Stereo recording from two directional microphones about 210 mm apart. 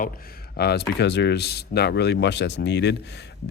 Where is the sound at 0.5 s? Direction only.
50° left (ahead or behind).